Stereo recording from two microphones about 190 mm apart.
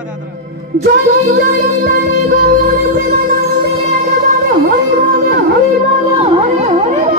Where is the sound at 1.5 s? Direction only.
55° right (ahead or behind).